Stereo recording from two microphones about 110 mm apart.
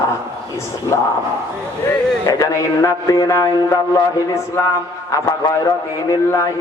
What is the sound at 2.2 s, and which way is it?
A man's voice, 30° left (ahead or behind).